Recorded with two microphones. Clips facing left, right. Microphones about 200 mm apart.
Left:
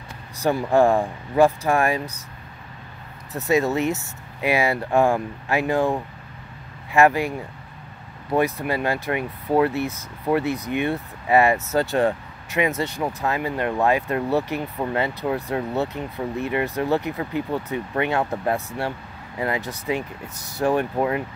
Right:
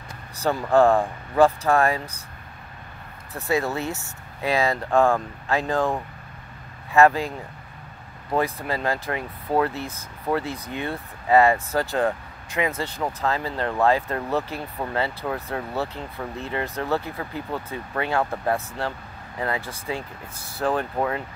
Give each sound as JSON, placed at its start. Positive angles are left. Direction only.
{"t": 0.4, "sound": "speech", "side_deg": 15}
{"t": 3.4, "sound": "speech", "side_deg": 20}
{"t": 8.5, "sound": "speech", "side_deg": 15}